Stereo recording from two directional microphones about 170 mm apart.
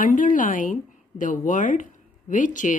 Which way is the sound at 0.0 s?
50° left (ahead or behind).